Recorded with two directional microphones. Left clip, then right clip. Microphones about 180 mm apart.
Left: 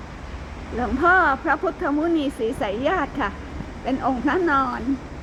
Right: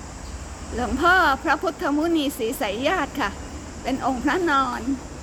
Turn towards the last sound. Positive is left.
turn(degrees=5)  # may be behind; listen again after turning